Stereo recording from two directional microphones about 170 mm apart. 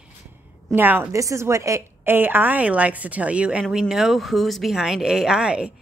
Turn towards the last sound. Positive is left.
turn(degrees=-5)  # may be behind; listen again after turning